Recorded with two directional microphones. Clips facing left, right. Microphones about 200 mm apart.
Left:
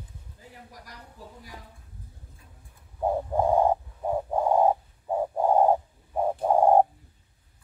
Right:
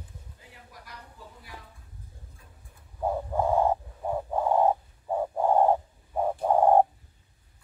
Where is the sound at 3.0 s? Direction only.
15° left (ahead or behind).